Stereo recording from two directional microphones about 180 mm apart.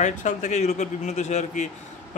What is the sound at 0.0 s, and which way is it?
A man's voice, 45° left (ahead or behind).